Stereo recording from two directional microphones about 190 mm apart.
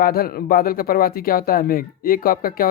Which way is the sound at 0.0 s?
50° left (ahead or behind).